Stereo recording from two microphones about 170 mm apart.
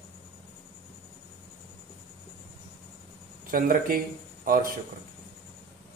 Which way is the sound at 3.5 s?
55° right (ahead or behind).